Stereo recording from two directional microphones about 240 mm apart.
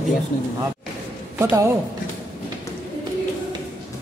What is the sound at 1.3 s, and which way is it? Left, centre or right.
Speech, centre.